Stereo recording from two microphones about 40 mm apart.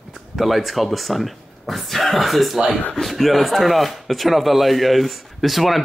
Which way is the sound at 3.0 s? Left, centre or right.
Centre.